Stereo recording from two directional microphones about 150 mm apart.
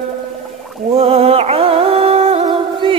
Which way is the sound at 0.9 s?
40° right (ahead or behind).